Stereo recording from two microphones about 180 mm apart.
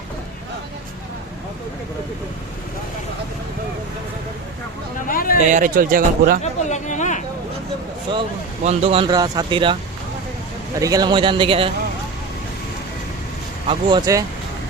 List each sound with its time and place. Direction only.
5.0 s speech: 50° left (ahead or behind)
5.5 s speech: 45° right (ahead or behind)
6.4 s a sound: 40° left (ahead or behind)
8.6 s speech: 35° right (ahead or behind)
10.8 s speech: 20° right (ahead or behind)
13.7 s speech: 25° right (ahead or behind)